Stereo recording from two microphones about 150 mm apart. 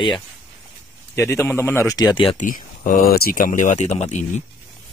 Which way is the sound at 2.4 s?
65° left (ahead or behind).